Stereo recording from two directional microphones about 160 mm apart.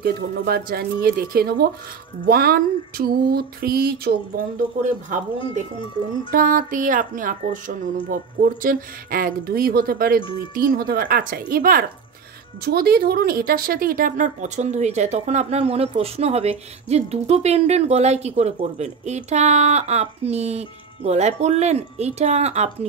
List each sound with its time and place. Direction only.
0.0 s a sound: 75° right (ahead or behind)
6.3 s speech: 60° right (ahead or behind)
12.6 s speech: 75° right (ahead or behind); by 22.8 s 40° right (ahead or behind)